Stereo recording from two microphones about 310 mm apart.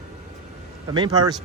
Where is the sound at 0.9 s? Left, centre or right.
Centre.